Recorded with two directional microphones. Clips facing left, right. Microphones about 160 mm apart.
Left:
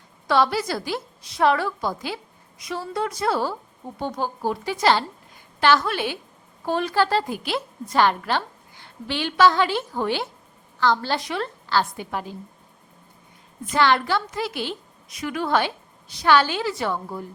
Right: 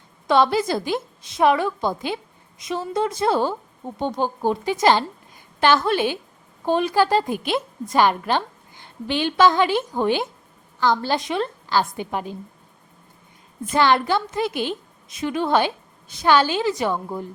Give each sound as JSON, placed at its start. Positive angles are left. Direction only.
{"t": 0.3, "sound": "a woman's voice", "side_deg": -20}
{"t": 13.7, "sound": "a woman's voice", "side_deg": -20}